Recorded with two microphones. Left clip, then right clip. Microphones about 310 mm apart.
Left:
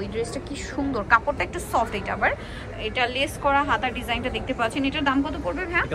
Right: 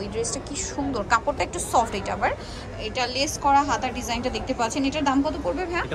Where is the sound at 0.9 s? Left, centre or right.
Centre.